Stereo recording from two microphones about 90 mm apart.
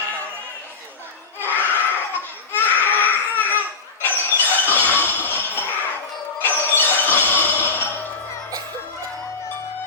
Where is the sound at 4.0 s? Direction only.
20° left (ahead or behind).